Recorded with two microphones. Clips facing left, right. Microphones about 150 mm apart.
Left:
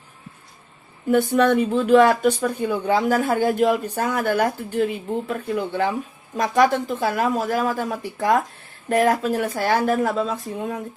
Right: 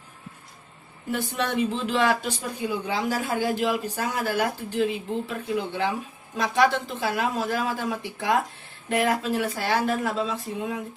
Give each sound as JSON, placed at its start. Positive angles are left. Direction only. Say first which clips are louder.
{"t": 1.1, "sound": "speech", "louder": "left 10 dB", "side_deg": 50}